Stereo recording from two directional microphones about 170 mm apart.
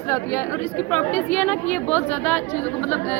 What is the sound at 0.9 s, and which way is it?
A woman's voice, 10° left (ahead or behind).